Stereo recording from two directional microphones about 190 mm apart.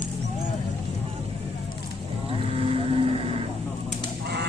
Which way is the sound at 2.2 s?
30° right (ahead or behind).